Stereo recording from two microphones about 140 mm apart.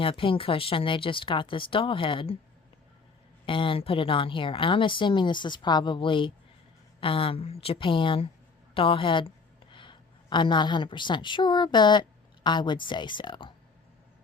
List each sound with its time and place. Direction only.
0.0 s a woman's voice: 40° left (ahead or behind)
3.4 s a woman's voice: 40° left (ahead or behind)